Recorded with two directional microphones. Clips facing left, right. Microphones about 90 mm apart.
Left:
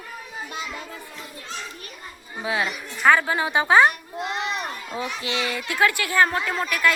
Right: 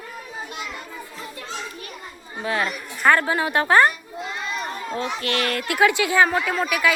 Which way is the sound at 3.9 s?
65° left (ahead or behind).